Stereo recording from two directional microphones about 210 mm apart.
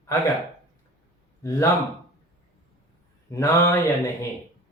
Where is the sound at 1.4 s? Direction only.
15° left (ahead or behind).